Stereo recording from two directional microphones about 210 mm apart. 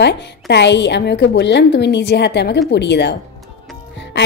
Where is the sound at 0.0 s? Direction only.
55° left (ahead or behind).